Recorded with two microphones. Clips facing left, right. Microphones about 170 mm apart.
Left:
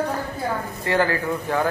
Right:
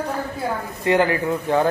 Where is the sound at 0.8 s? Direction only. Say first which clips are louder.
Right 4 dB; 20° right (ahead or behind).